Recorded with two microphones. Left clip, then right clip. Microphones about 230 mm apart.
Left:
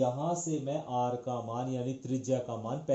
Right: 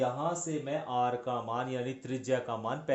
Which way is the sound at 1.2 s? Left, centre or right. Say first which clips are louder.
Right 2 dB; right.